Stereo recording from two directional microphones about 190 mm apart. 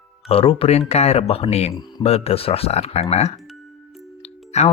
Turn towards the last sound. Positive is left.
turn(degrees=35)  # may be behind; listen again after turning